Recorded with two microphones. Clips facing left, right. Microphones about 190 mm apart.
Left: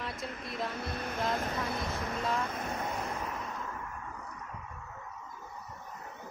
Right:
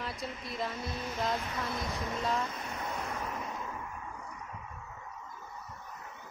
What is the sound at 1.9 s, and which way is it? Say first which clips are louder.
Speech: even; centre (ahead or behind).